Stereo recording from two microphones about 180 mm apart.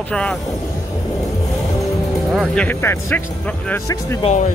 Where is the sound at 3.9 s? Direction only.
20° left (ahead or behind).